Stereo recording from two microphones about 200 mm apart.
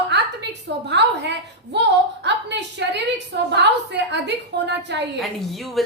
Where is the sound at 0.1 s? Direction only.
60° right (ahead or behind).